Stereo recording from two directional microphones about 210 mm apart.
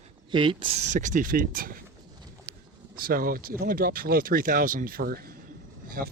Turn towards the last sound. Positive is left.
turn(degrees=-45)  # may be behind; listen again after turning